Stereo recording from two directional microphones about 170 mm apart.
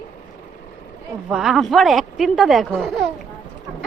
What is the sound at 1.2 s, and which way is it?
Speech, 5° right (ahead or behind).